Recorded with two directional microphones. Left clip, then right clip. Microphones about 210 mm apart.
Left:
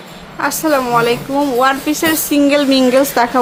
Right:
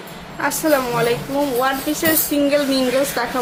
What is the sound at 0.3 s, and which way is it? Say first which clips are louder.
A woman's voice: left 3 dB; 20° left (ahead or behind).